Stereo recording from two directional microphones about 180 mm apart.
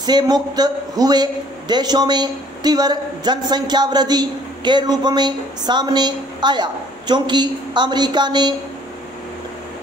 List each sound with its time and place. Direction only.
0.0 s a man's voice: 20° right (ahead or behind)